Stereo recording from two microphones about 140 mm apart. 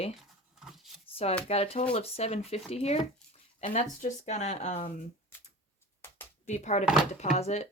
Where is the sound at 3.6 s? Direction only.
70° left (ahead or behind); by 4.9 s 50° left (ahead or behind).